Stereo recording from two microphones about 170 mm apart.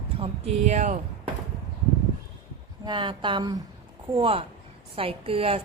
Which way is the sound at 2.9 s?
25° right (ahead or behind).